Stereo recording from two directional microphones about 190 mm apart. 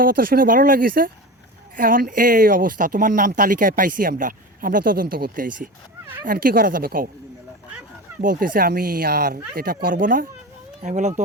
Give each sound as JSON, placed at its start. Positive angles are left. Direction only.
{"t": 0.0, "sound": "speech", "side_deg": -50}
{"t": 8.2, "sound": "speech", "side_deg": -45}